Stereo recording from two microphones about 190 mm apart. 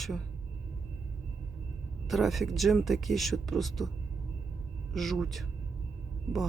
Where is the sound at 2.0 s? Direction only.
Centre (ahead or behind).